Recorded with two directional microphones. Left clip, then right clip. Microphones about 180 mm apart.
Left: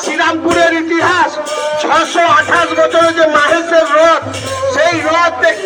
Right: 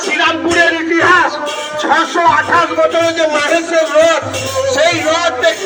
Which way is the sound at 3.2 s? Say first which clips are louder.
Left 4 dB; 20° right (ahead or behind).